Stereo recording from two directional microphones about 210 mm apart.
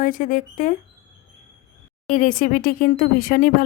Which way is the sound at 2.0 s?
40° left (ahead or behind).